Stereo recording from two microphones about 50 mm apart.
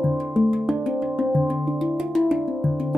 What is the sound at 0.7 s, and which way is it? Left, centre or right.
Music, centre.